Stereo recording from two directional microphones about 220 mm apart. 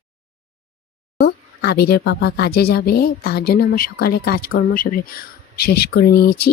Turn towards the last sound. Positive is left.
turn(degrees=45)  # may be behind; listen again after turning